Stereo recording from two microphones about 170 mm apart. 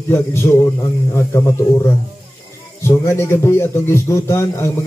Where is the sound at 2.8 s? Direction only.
15° left (ahead or behind).